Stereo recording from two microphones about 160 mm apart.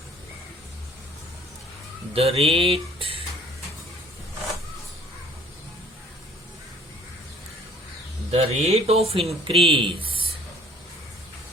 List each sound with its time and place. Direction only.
2.1 s music: 40° right (ahead or behind)
8.3 s music: 40° right (ahead or behind)
9.8 s speech: 35° right (ahead or behind)